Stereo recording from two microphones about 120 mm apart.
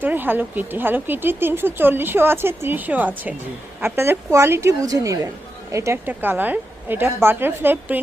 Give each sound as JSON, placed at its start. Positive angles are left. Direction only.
{"t": 0.0, "sound": "a woman's voice", "side_deg": -15}